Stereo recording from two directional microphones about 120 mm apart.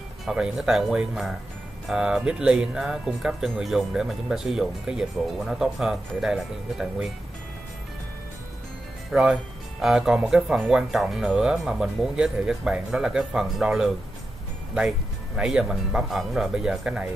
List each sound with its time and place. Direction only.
0.2 s speech: 5° right (ahead or behind)
9.1 s speech: 5° right (ahead or behind)